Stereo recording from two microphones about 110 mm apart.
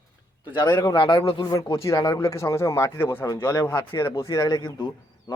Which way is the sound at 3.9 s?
25° left (ahead or behind).